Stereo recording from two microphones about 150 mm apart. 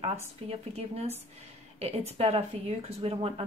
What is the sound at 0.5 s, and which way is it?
Speech, 45° right (ahead or behind).